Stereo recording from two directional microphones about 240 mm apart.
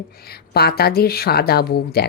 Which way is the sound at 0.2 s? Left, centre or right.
Left.